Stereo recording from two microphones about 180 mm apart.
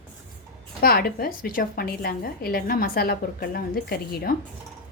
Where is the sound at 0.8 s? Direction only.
55° left (ahead or behind).